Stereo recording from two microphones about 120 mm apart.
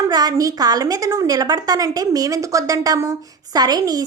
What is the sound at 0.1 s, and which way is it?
A woman's voice, 35° right (ahead or behind).